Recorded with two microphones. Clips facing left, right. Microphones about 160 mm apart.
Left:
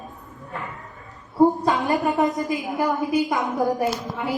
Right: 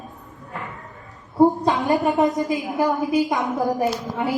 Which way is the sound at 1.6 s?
20° right (ahead or behind).